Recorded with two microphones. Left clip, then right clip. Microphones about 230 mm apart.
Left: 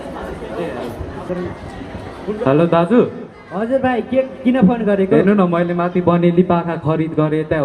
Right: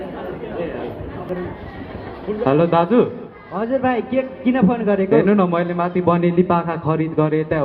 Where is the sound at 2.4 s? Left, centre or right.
Left.